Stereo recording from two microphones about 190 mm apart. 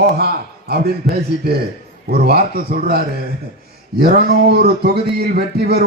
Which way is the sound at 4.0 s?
55° right (ahead or behind).